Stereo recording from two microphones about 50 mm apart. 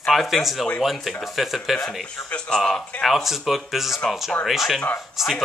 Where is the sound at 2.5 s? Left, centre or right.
Centre.